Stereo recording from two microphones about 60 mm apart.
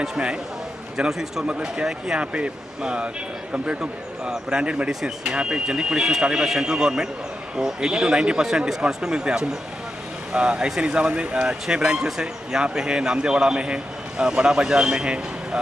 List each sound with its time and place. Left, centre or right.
0.9 s speech: centre